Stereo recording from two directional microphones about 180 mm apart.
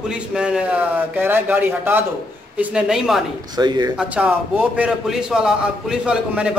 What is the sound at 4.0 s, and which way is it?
A man's voice, 10° right (ahead or behind).